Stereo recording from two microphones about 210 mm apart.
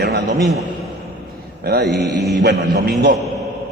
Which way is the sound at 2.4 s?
50° right (ahead or behind).